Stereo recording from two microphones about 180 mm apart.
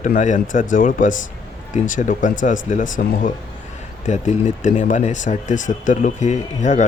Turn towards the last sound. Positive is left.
turn(degrees=40)  # may be behind; listen again after turning